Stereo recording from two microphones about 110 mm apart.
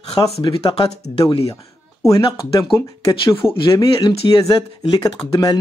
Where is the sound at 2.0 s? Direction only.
30° left (ahead or behind).